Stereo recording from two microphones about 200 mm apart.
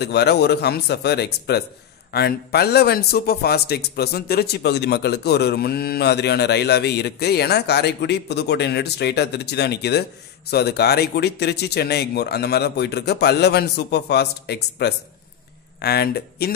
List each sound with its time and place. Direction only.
0.0 s a man's voice: 55° left (ahead or behind)